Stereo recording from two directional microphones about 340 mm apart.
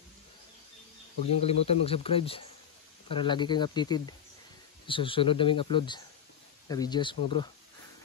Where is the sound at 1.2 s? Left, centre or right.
Centre.